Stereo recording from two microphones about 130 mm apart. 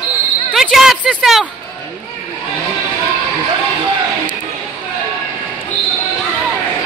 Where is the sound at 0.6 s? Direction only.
Centre (ahead or behind).